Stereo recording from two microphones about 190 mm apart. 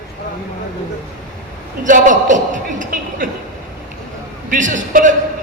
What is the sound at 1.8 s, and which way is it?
Speech, 40° right (ahead or behind).